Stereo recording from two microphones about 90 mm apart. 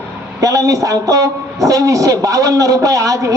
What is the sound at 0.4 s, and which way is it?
A man's voice, 40° right (ahead or behind).